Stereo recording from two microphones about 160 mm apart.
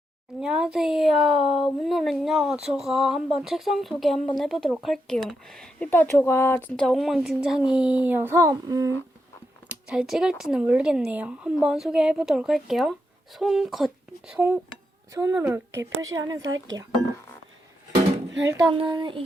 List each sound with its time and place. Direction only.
0.3 s a woman's voice: 5° right (ahead or behind); by 9.0 s 20° right (ahead or behind)
9.6 s a woman's voice: 5° right (ahead or behind); by 16.8 s 25° right (ahead or behind)
18.4 s a woman's voice: 20° right (ahead or behind)
18.7 s speech: 30° right (ahead or behind)